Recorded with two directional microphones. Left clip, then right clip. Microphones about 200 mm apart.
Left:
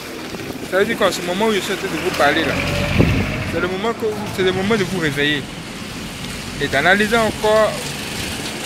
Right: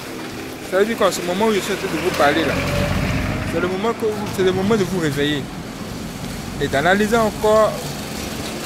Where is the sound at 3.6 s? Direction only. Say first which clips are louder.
Even; 10° right (ahead or behind).